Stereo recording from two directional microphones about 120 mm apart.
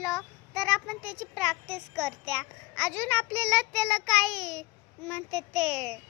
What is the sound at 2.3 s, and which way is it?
Speech, 10° left (ahead or behind).